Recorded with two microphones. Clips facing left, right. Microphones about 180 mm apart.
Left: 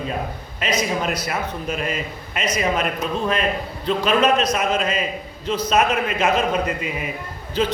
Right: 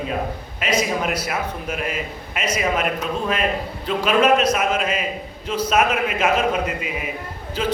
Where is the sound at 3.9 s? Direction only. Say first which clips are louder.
Right 1 dB; 10° right (ahead or behind).